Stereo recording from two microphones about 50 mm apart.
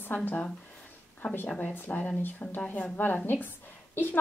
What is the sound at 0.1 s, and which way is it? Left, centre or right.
Speech, left.